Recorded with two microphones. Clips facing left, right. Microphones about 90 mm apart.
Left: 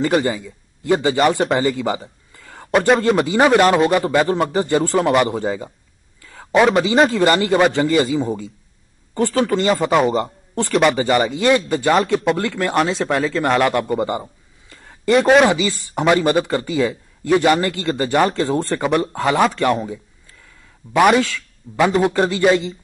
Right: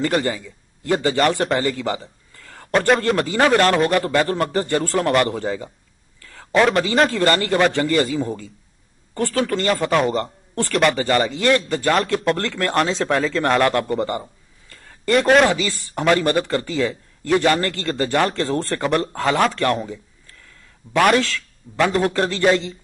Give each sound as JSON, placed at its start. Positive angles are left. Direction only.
{"t": 0.0, "sound": "speech", "side_deg": 10}
{"t": 1.6, "sound": "a sound", "side_deg": 15}
{"t": 3.1, "sound": "speech", "side_deg": 15}
{"t": 10.7, "sound": "speech", "side_deg": 0}
{"t": 11.1, "sound": "speech", "side_deg": 15}
{"t": 15.0, "sound": "speech", "side_deg": 5}
{"t": 15.4, "sound": "speech", "side_deg": 15}
{"t": 15.7, "sound": "speech", "side_deg": 5}
{"t": 19.1, "sound": "speech", "side_deg": 15}